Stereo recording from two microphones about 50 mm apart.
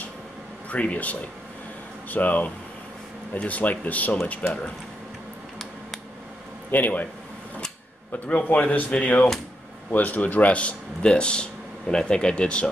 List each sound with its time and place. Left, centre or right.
0.7 s speech: left
6.7 s speech: left
8.5 s speech: left
9.8 s speech: left